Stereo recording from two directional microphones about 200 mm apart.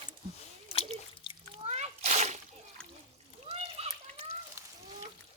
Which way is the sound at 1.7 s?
35° right (ahead or behind).